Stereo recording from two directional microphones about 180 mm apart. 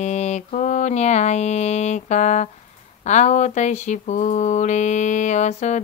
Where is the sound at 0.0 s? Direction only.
40° left (ahead or behind).